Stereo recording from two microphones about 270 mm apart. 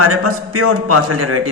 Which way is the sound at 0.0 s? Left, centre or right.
Right.